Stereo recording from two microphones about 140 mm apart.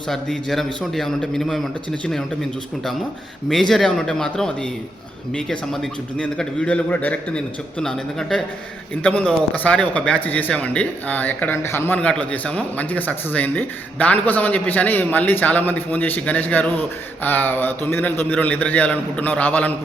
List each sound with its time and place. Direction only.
0.1 s a man's voice: 5° left (ahead or behind)
3.5 s a man's voice: centre (ahead or behind)